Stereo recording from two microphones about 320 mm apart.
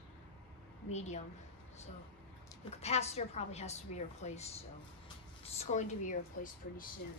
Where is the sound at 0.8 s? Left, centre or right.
Left.